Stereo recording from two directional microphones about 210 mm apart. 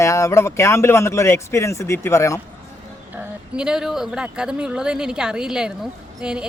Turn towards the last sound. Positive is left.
turn(degrees=-5)  # may be behind; listen again after turning